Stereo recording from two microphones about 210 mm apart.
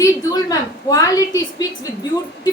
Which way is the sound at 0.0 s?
15° left (ahead or behind).